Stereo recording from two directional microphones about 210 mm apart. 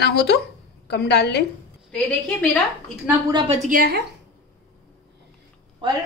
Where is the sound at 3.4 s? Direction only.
40° right (ahead or behind).